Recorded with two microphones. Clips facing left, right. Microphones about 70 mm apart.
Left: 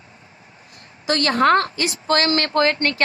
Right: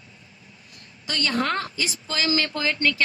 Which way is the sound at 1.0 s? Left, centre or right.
Left.